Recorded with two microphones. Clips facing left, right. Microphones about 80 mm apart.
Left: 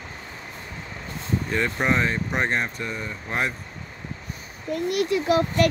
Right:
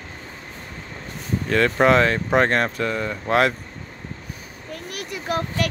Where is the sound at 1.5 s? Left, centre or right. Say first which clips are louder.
Right 8 dB; right.